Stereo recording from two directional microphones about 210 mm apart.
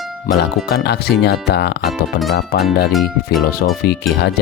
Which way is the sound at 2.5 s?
50° left (ahead or behind).